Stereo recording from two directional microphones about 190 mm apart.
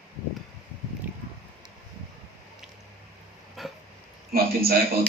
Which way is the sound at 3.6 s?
Centre (ahead or behind).